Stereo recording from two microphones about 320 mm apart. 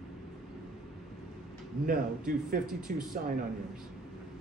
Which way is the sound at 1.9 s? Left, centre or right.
Right.